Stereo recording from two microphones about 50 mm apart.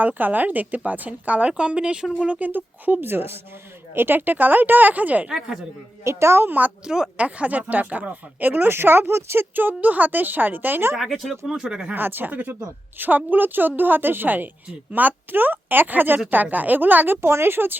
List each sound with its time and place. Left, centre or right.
0.0 s speech: right; by 2.1 s centre
2.2 s speech: right
6.1 s a woman's voice: right
6.4 s speech: right
6.8 s speech: centre
7.2 s speech: right
10.9 s speech: centre
11.9 s speech: right
17.2 s speech: right